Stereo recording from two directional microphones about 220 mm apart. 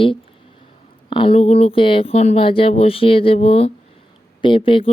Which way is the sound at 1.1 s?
25° left (ahead or behind).